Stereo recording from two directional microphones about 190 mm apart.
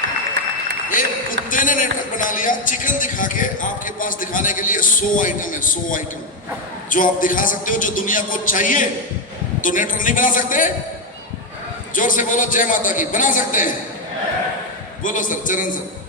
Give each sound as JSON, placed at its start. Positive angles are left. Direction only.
{"t": 0.9, "sound": "speech", "side_deg": 45}
{"t": 11.9, "sound": "speech", "side_deg": 45}
{"t": 15.0, "sound": "speech", "side_deg": 45}